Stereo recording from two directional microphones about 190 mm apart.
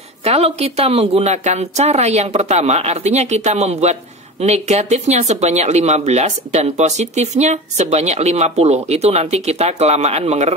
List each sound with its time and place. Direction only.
0.2 s speech: 35° right (ahead or behind)